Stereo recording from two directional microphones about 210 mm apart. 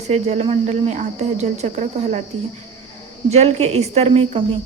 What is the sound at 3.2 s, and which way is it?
Speech, 30° right (ahead or behind).